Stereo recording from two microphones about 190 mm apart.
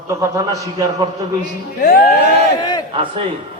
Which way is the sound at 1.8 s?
55° left (ahead or behind).